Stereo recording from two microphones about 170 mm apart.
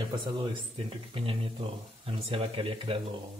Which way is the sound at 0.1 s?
30° right (ahead or behind).